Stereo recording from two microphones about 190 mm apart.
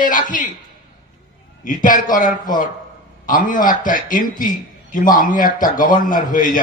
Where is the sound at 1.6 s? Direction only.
45° left (ahead or behind).